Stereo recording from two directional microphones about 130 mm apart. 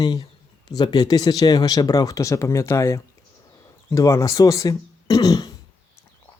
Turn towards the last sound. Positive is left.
turn(degrees=30)  # may be behind; listen again after turning